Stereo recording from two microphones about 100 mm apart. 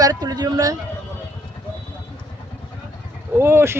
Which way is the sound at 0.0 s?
40° right (ahead or behind).